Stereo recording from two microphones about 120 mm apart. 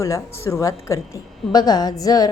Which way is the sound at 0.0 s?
25° left (ahead or behind).